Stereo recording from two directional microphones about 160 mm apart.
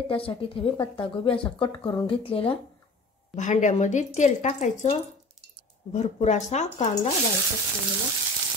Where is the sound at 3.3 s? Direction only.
50° left (ahead or behind).